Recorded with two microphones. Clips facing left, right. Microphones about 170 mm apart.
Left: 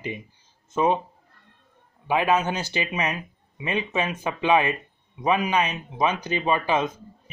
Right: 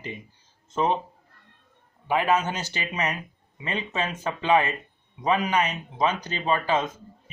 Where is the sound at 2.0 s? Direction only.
15° left (ahead or behind).